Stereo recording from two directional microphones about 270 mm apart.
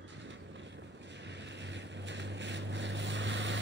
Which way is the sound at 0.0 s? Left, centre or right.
Right.